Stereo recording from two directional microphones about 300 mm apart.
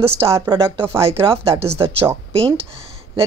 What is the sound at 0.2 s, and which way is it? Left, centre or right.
A woman's voice, centre.